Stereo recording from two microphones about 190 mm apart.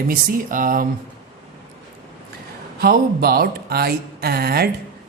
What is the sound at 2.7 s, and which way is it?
A woman's voice, 55° right (ahead or behind).